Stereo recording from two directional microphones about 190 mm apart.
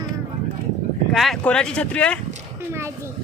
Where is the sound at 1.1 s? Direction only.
Centre (ahead or behind).